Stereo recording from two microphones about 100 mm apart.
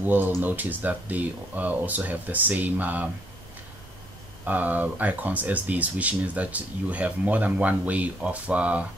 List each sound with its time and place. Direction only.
0.0 s speech: 20° right (ahead or behind)
4.5 s speech: 15° right (ahead or behind)